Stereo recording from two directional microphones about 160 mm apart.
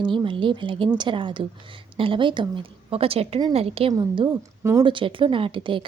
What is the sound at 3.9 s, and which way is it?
Speech, 20° right (ahead or behind).